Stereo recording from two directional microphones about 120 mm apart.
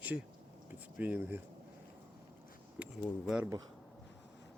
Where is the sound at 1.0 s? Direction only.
15° right (ahead or behind).